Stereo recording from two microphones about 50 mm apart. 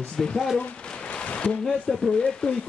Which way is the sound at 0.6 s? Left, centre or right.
Left.